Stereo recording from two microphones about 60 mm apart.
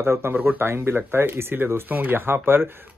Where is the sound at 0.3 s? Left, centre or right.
Right.